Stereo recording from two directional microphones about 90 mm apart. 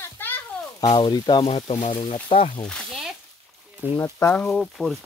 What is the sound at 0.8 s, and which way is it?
Speech, 50° left (ahead or behind).